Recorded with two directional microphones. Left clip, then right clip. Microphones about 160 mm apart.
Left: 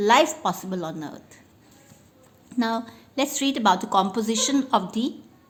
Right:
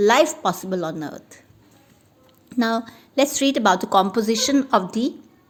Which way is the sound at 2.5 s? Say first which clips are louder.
Right 4 dB; 35° right (ahead or behind).